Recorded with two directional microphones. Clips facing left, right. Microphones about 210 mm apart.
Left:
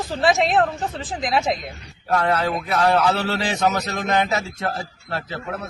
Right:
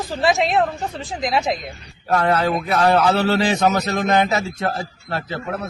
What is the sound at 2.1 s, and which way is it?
Speech, 50° right (ahead or behind).